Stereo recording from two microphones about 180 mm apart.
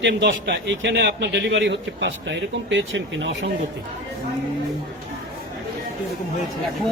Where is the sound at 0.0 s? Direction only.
75° right (ahead or behind).